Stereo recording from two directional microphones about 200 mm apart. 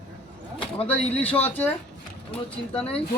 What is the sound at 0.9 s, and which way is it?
Speech, 5° left (ahead or behind).